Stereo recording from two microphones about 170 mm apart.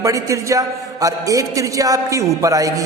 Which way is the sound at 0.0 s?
20° right (ahead or behind).